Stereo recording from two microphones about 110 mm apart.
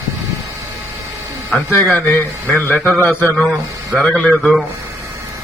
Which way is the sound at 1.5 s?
15° left (ahead or behind).